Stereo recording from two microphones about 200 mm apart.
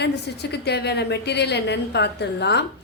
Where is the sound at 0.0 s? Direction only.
55° left (ahead or behind).